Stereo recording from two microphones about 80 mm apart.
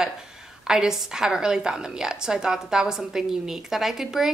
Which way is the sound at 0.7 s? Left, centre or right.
Centre.